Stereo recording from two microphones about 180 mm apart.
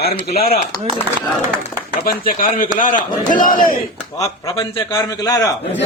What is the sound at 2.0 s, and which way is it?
Speech, 50° left (ahead or behind).